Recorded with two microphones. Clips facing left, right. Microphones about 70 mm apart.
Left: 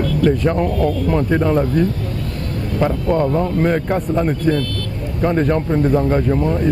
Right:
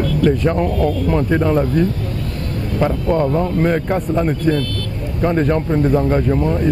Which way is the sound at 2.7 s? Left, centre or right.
Right.